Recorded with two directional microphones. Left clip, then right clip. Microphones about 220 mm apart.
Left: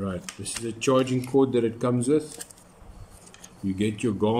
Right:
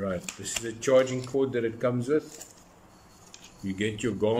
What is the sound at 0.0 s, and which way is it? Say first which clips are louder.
Speech: right 1 dB; 10° left (ahead or behind).